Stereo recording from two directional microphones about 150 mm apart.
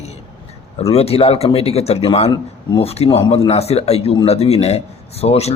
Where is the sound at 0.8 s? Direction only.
40° left (ahead or behind).